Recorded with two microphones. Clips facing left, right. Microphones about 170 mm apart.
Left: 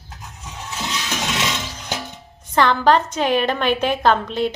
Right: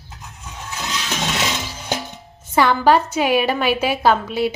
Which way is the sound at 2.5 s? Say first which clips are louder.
Right 1 dB; 10° right (ahead or behind).